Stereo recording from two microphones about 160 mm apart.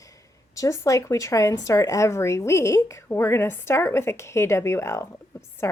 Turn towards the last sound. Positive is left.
turn(degrees=15)  # may be behind; listen again after turning